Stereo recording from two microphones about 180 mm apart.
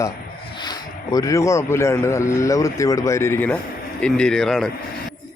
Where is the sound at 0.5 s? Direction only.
25° left (ahead or behind); by 4.7 s centre (ahead or behind).